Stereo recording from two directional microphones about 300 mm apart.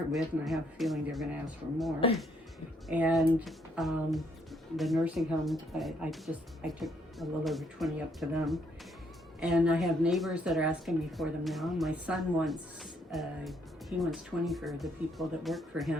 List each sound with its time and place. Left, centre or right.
0.2 s speech: centre
2.0 s speech: centre
2.9 s speech: centre